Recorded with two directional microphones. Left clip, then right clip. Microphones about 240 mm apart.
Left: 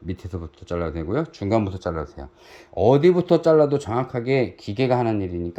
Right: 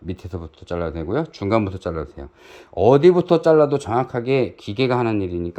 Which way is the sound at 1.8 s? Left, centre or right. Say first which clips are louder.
Right 1 dB; right.